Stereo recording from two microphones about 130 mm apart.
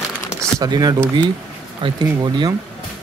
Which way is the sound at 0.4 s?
30° right (ahead or behind).